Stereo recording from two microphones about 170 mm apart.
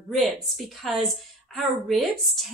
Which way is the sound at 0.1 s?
Centre (ahead or behind).